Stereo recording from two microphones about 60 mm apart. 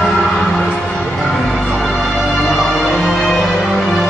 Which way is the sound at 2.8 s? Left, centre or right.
Centre.